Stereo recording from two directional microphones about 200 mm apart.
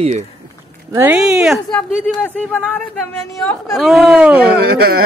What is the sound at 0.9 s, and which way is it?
Speech, 5° right (ahead or behind).